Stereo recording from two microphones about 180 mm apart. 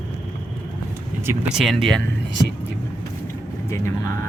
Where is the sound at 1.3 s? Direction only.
Centre (ahead or behind).